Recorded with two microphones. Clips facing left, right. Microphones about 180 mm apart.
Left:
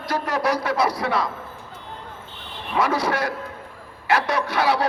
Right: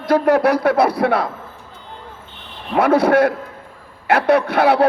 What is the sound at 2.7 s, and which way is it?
A woman's voice, 60° right (ahead or behind).